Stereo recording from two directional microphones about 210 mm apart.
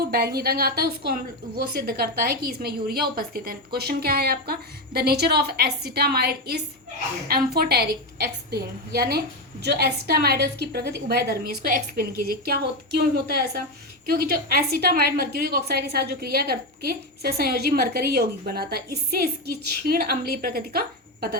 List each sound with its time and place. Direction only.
0.0 s a woman's voice: 45° right (ahead or behind)